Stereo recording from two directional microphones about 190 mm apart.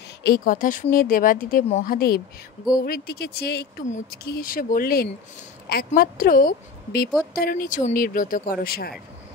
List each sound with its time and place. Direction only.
0.2 s speech: 50° left (ahead or behind)